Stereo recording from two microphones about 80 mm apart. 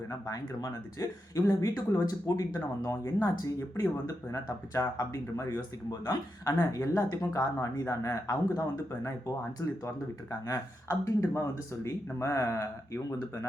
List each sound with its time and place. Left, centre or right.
0.1 s speech: left